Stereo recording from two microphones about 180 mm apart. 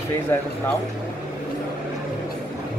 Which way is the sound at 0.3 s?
10° left (ahead or behind).